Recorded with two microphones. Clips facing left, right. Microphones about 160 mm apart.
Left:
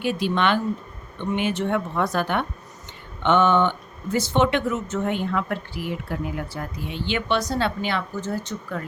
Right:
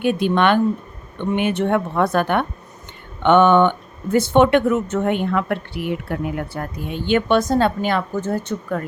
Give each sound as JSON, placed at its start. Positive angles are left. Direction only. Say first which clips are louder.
{"t": 0.0, "sound": "speech", "louder": "right 5 dB", "side_deg": -55}